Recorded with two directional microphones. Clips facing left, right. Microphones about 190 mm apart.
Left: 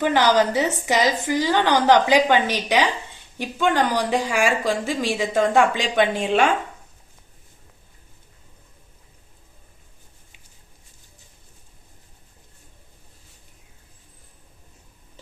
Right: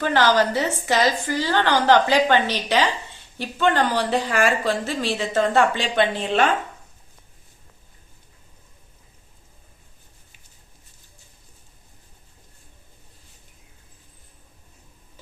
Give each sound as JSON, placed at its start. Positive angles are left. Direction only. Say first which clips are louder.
{"t": 0.0, "sound": "speech", "louder": "left 1 dB", "side_deg": 15}